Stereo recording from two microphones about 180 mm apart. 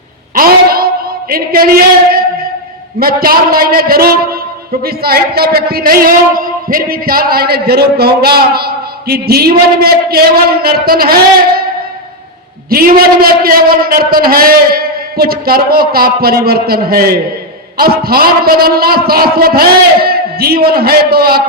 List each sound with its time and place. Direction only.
0.3 s a sound: 55° right (ahead or behind)
1.3 s a man's voice: 55° right (ahead or behind)
12.7 s a man's voice: 55° right (ahead or behind)